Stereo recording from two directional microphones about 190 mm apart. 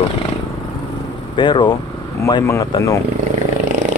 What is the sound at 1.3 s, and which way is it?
Speech, 25° left (ahead or behind).